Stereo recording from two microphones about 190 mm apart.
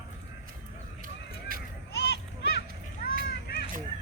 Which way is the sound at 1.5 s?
50° right (ahead or behind).